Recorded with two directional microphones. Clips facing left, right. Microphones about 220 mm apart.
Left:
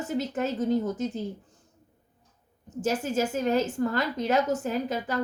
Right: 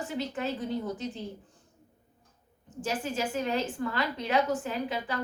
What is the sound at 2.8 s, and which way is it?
A woman's voice, 45° left (ahead or behind).